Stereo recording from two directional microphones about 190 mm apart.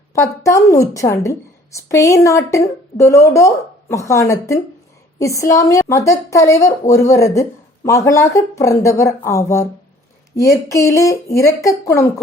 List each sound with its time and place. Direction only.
0.1 s a woman's voice: 15° left (ahead or behind)